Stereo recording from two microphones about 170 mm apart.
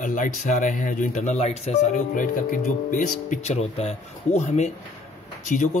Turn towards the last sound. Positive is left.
turn(degrees=45)  # may be behind; listen again after turning